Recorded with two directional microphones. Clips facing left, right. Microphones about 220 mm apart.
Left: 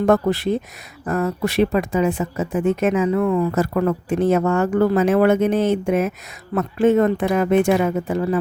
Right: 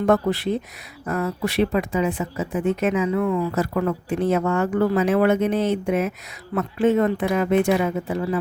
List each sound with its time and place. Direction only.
0.0 s speech: 45° left (ahead or behind)